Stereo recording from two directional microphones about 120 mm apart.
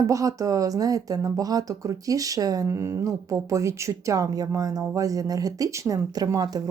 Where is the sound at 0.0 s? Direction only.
30° right (ahead or behind).